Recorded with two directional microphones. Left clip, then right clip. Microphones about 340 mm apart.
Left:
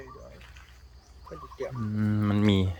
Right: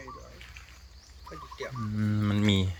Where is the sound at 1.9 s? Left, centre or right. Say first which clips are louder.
Left 2 dB; centre.